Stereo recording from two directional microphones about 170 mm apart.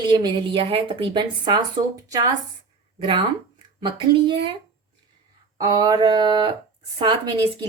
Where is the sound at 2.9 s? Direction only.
30° right (ahead or behind).